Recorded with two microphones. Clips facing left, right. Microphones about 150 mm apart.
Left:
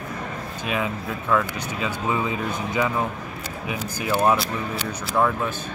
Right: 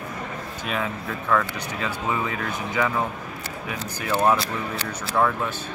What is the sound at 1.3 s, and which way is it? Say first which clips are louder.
Speech: left 1 dB; 15° left (ahead or behind).